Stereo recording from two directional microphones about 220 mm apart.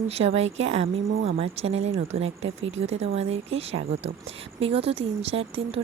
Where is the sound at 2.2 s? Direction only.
60° right (ahead or behind).